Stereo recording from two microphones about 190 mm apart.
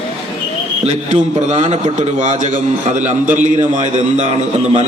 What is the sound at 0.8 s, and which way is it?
A man's voice, 40° right (ahead or behind).